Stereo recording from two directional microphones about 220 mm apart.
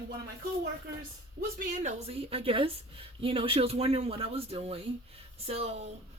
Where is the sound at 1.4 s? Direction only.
40° right (ahead or behind).